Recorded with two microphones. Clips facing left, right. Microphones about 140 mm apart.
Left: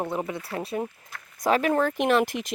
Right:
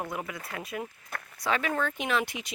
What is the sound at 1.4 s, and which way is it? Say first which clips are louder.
Speech: left 7 dB; 45° left (ahead or behind).